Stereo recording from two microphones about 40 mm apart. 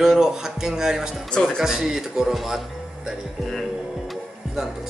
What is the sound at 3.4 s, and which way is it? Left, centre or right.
Music, centre.